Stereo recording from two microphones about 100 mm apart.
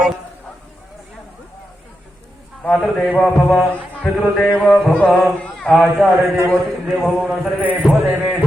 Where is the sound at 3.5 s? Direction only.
20° left (ahead or behind).